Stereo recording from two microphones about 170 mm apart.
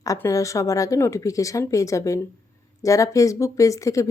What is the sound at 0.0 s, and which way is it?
A woman's voice, 20° left (ahead or behind).